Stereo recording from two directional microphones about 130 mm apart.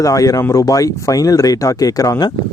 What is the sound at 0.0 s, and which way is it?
Speech, 25° left (ahead or behind).